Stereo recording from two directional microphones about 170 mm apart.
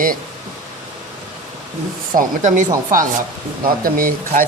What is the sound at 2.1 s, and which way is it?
Speech, 50° right (ahead or behind).